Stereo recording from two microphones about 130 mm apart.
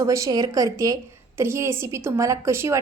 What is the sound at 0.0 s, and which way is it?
A woman's voice, 25° right (ahead or behind).